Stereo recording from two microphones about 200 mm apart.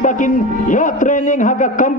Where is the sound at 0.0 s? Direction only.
40° left (ahead or behind).